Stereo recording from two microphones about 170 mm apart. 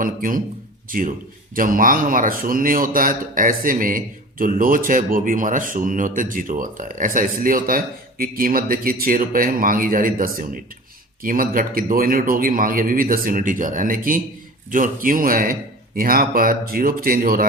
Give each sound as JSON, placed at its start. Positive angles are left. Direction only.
{"t": 0.0, "sound": "a man's voice", "side_deg": -55}